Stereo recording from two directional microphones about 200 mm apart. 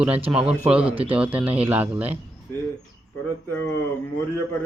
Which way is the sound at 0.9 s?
25° right (ahead or behind).